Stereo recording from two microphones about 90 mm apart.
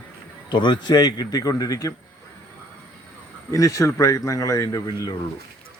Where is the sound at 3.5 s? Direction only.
35° left (ahead or behind).